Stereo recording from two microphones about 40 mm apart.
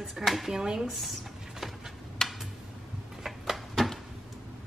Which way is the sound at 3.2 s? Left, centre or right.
Centre.